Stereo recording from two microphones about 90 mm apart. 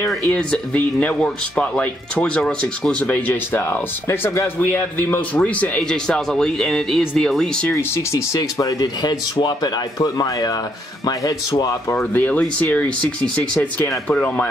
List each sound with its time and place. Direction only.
0.3 s speech: 15° left (ahead or behind)
7.7 s speech: 35° left (ahead or behind)
11.9 s speech: 25° left (ahead or behind)
14.0 s speech: 15° left (ahead or behind)